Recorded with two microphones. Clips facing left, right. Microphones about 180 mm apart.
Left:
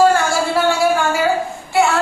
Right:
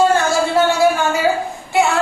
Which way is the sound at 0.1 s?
20° right (ahead or behind).